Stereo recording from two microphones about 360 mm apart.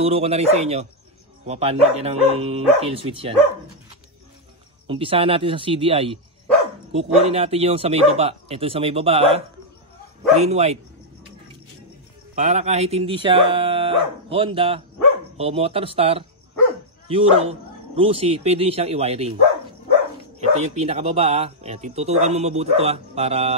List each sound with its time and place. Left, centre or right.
0.0 s speech: centre
4.8 s speech: centre
12.4 s speech: centre
20.3 s speech: centre